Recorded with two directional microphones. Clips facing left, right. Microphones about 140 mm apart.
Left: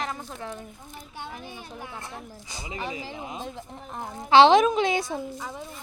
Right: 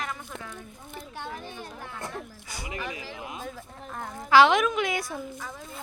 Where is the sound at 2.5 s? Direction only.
25° left (ahead or behind).